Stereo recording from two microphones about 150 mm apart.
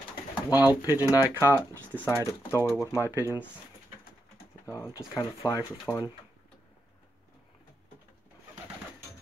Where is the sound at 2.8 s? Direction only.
20° left (ahead or behind).